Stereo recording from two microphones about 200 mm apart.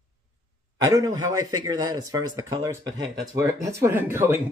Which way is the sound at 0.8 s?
20° right (ahead or behind).